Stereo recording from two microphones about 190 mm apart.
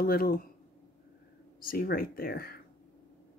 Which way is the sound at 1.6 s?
50° left (ahead or behind).